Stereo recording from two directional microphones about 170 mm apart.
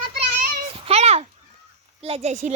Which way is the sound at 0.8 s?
40° right (ahead or behind).